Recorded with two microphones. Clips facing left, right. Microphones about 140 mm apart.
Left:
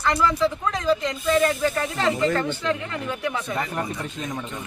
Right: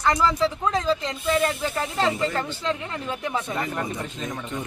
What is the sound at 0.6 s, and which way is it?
Speech, 25° right (ahead or behind).